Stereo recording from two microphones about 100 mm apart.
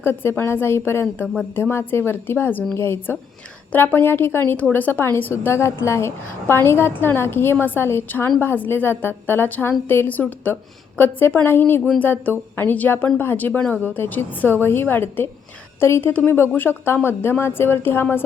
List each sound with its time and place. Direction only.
0.0 s a woman's voice: 20° left (ahead or behind)